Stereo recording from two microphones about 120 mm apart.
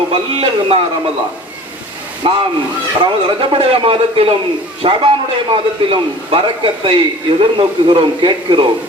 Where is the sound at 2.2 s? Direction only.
45° right (ahead or behind).